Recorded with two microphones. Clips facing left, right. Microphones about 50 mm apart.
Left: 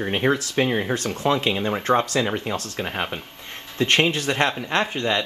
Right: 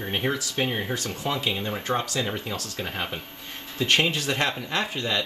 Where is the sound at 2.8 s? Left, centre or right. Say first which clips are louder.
Left 4 dB; left.